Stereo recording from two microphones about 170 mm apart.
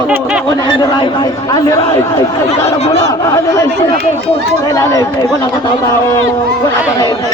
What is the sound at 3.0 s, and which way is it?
Speech, 20° left (ahead or behind).